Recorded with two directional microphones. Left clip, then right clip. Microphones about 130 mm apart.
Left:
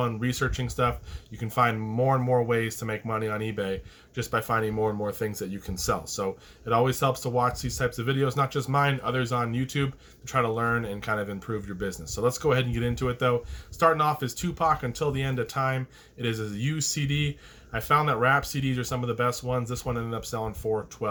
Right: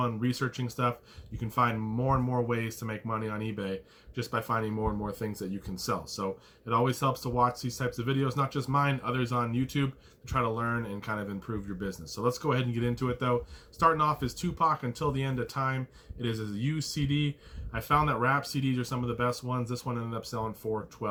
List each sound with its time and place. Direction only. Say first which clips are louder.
0.0 s speech: left 3 dB; 30° left (ahead or behind)